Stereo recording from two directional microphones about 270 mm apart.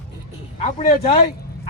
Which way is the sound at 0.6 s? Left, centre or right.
Left.